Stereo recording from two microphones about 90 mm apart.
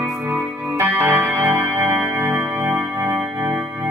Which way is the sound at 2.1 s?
35° right (ahead or behind).